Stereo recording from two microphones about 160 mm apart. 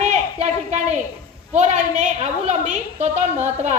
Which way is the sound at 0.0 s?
45° right (ahead or behind).